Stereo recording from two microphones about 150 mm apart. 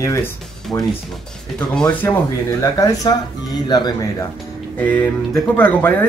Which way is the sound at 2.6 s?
25° left (ahead or behind).